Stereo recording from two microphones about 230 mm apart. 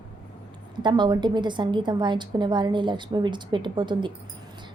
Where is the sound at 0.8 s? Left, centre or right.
Centre.